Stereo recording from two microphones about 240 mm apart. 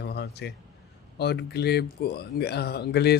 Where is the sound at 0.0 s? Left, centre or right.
Left.